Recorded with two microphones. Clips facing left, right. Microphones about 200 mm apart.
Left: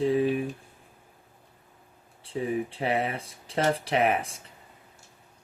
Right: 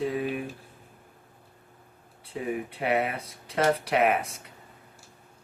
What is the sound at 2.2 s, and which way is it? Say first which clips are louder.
Speech: left 3 dB; 30° left (ahead or behind).